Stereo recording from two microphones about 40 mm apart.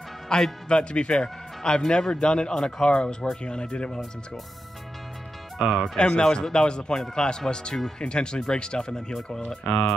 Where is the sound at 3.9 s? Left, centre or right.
Centre.